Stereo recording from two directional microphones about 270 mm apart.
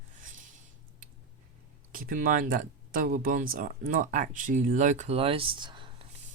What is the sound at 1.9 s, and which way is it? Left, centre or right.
Speech, right.